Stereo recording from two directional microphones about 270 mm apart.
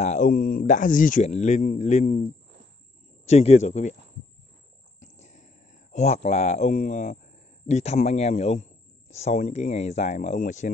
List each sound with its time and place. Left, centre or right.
0.0 s speech: left
3.3 s speech: left
5.0 s a sound: left
7.6 s speech: left